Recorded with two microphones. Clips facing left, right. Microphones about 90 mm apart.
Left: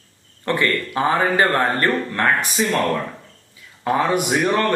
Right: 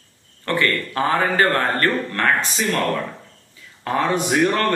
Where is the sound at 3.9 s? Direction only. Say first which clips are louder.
Left 1 dB; 15° left (ahead or behind).